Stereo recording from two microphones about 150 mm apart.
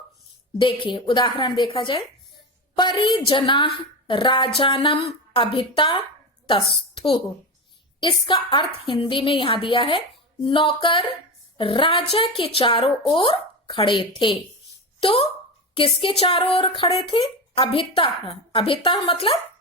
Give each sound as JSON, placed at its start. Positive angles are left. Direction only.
{"t": 0.6, "sound": "speech", "side_deg": 35}
{"t": 8.0, "sound": "speech", "side_deg": 35}